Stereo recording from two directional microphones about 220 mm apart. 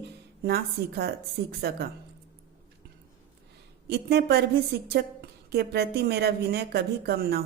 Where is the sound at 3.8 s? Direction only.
45° right (ahead or behind).